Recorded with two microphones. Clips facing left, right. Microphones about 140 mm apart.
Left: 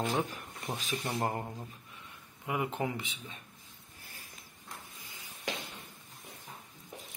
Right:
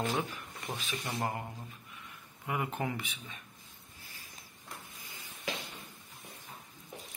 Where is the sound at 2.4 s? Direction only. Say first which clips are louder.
Left 1 dB; 20° left (ahead or behind).